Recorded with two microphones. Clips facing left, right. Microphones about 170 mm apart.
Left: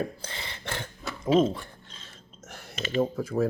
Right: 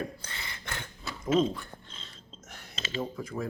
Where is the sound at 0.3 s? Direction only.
30° left (ahead or behind).